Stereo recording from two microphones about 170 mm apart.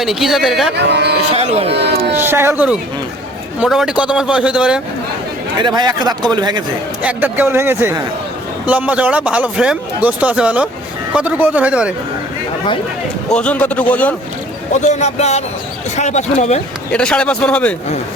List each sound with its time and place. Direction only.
0.0 s speech: centre (ahead or behind)
0.9 s speech: 75° right (ahead or behind)
1.3 s speech: 35° right (ahead or behind)
1.7 s speech: 80° right
2.1 s speech: 15° right (ahead or behind)
5.5 s speech: 25° right (ahead or behind)
7.0 s speech: 10° right (ahead or behind)
13.3 s a man's voice: 5° left (ahead or behind)
14.7 s speech: 45° left (ahead or behind)
16.9 s a man's voice: 5° left (ahead or behind)